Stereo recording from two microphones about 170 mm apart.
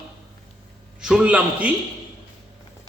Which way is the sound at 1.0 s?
5° right (ahead or behind).